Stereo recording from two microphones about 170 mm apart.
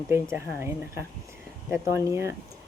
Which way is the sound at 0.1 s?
15° right (ahead or behind).